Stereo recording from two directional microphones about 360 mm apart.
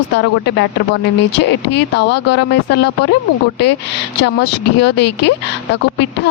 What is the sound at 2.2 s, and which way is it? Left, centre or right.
Speech, left.